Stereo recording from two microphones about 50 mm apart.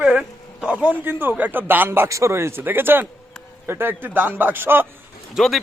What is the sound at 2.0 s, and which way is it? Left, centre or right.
Speech, right.